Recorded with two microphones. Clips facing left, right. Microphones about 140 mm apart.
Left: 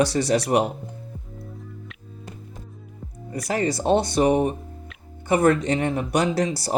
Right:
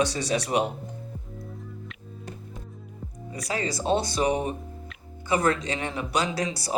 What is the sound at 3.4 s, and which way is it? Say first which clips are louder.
Speech: left 5 dB; 60° left (ahead or behind).